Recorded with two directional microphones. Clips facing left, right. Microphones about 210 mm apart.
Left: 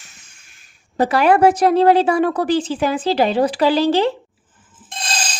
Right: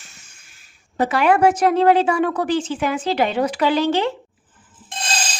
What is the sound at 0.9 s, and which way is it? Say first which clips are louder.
A woman's voice: left 2 dB; 35° left (ahead or behind).